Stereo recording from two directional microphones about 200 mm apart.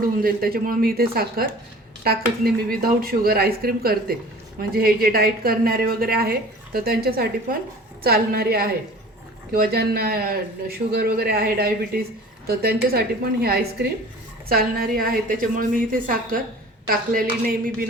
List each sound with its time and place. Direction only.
0.2 s speech: 45° right (ahead or behind)